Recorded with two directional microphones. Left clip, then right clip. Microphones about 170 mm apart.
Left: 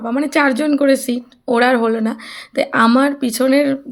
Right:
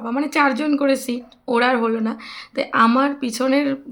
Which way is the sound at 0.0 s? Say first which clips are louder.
Left 3 dB; 20° left (ahead or behind).